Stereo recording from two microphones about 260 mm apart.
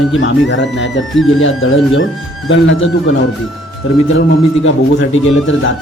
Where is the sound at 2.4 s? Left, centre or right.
Left.